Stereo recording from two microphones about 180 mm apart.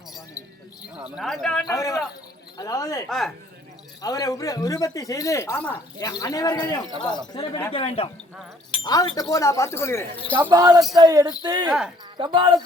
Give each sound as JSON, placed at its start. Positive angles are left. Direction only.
{"t": 0.9, "sound": "speech", "side_deg": -5}
{"t": 1.6, "sound": "speech", "side_deg": 20}
{"t": 3.1, "sound": "speech", "side_deg": 0}
{"t": 4.0, "sound": "speech", "side_deg": 20}
{"t": 10.3, "sound": "speech", "side_deg": -15}